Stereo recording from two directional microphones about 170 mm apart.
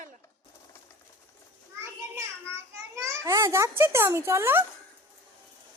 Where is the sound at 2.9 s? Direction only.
15° right (ahead or behind).